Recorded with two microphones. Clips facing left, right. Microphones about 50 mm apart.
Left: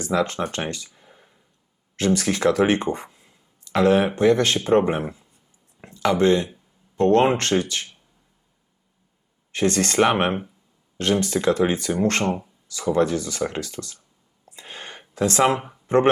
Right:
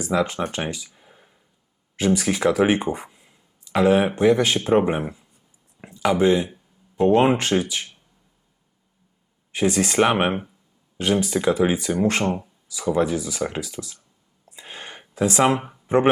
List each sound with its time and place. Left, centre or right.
0.0 s speech: centre
9.5 s speech: centre
14.4 s a sound: centre